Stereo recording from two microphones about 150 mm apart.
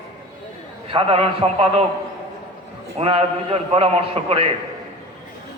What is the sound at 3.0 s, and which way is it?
A man's voice, 40° right (ahead or behind).